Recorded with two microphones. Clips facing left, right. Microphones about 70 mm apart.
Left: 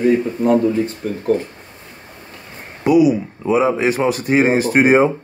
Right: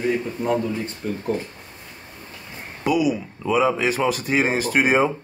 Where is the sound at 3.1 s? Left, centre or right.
Left.